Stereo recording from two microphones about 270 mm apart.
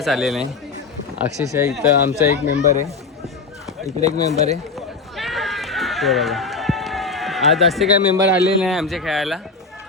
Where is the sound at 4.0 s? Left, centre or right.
Right.